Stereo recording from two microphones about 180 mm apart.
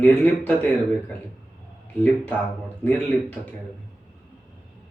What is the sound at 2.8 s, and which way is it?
Speech, 10° left (ahead or behind).